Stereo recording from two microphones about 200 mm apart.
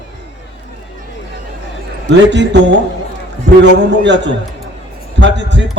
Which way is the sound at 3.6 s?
60° right (ahead or behind).